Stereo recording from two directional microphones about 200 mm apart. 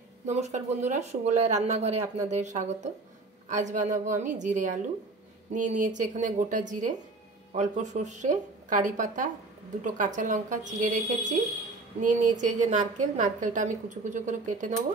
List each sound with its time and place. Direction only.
0.3 s speech: 35° right (ahead or behind)